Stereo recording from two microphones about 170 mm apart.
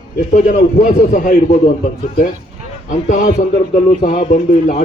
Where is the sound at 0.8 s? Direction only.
50° left (ahead or behind).